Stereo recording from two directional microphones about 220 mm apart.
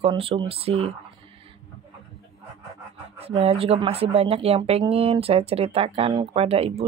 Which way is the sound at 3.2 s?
25° right (ahead or behind).